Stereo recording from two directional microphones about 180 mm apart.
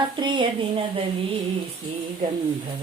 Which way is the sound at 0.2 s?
25° right (ahead or behind).